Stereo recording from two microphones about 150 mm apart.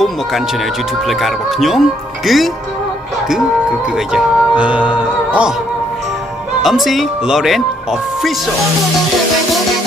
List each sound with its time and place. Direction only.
1.0 s speech: centre (ahead or behind)
3.9 s music: 5° right (ahead or behind)
6.6 s speech: centre (ahead or behind)